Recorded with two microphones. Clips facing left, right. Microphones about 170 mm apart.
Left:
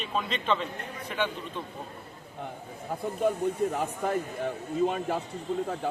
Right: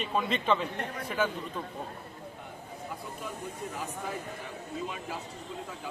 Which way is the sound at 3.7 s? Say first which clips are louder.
Left 8 dB; 55° left (ahead or behind).